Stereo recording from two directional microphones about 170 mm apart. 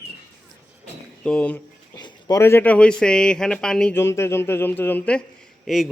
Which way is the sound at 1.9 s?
25° left (ahead or behind).